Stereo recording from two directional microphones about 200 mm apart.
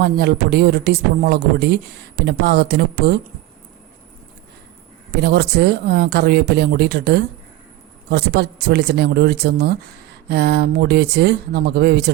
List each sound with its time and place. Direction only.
0.0 s speech: 55° right (ahead or behind)
5.1 s speech: 55° right (ahead or behind)